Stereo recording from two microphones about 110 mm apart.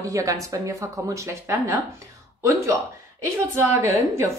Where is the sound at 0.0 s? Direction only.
30° right (ahead or behind).